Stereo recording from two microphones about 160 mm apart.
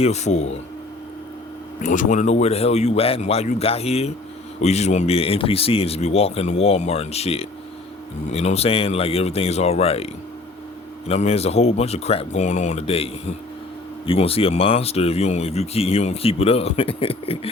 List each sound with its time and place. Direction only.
0.0 s speech: 45° left (ahead or behind)
1.8 s speech: 50° left (ahead or behind)
11.1 s speech: 40° left (ahead or behind)